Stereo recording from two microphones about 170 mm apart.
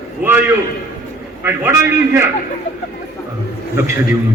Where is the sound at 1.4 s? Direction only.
15° right (ahead or behind).